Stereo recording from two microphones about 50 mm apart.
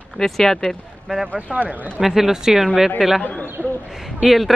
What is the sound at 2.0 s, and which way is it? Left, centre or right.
Speech, centre.